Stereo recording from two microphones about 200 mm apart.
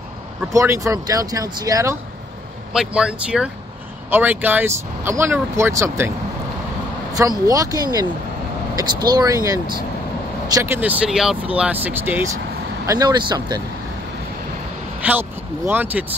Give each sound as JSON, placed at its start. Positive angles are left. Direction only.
{"t": 0.5, "sound": "speech", "side_deg": -15}
{"t": 2.7, "sound": "speech", "side_deg": -5}
{"t": 7.2, "sound": "speech", "side_deg": -15}
{"t": 15.0, "sound": "speech", "side_deg": -10}